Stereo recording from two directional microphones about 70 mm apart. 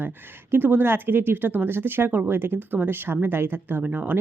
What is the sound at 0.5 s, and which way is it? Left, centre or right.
Speech, right.